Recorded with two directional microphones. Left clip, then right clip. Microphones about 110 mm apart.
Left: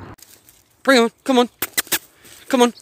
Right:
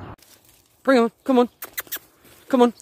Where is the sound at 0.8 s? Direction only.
Centre (ahead or behind).